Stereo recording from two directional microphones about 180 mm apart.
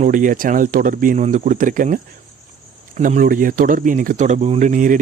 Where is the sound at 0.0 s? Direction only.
45° right (ahead or behind).